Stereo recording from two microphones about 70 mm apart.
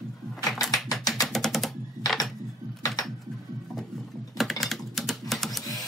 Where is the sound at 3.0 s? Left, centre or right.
Left.